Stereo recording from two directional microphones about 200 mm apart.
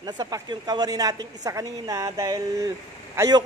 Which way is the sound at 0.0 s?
20° right (ahead or behind).